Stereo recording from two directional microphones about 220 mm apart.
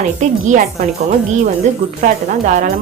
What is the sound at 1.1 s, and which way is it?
A woman's voice, 35° right (ahead or behind).